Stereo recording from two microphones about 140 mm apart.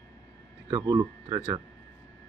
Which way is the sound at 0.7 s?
30° right (ahead or behind).